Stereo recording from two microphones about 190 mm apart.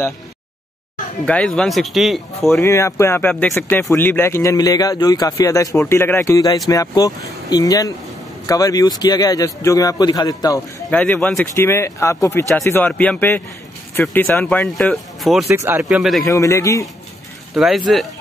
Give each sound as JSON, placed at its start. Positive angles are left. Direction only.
{"t": 1.2, "sound": "speech", "side_deg": 5}
{"t": 2.6, "sound": "a man's voice", "side_deg": 15}
{"t": 10.9, "sound": "a man's voice", "side_deg": 10}
{"t": 15.5, "sound": "speech", "side_deg": -15}
{"t": 15.8, "sound": "speech", "side_deg": 0}
{"t": 16.3, "sound": "a man's voice", "side_deg": 15}
{"t": 17.6, "sound": "speech", "side_deg": 0}